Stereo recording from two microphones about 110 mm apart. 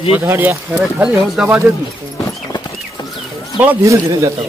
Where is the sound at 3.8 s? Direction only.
30° right (ahead or behind).